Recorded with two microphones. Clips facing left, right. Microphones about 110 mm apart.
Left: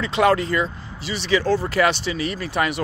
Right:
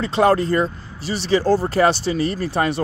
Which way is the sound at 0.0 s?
35° right (ahead or behind).